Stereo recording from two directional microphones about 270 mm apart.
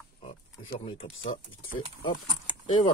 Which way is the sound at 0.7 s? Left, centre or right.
Left.